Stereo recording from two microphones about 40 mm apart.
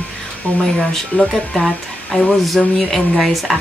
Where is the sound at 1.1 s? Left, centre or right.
Left.